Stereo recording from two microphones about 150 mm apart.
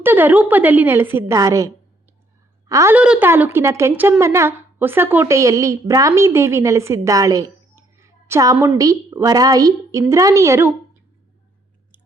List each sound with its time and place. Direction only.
0.0 s a woman's voice: 15° right (ahead or behind)
2.9 s speech: 10° right (ahead or behind)